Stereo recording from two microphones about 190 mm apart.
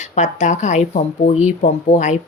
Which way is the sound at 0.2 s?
40° left (ahead or behind).